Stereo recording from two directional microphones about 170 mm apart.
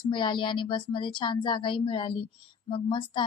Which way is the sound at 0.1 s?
30° left (ahead or behind).